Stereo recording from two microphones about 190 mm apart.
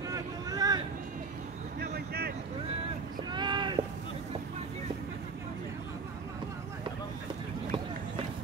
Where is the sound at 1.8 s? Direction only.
55° right (ahead or behind).